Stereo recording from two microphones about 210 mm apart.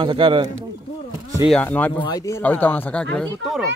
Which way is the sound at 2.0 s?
20° left (ahead or behind).